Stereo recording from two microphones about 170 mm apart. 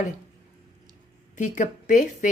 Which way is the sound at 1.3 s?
45° left (ahead or behind).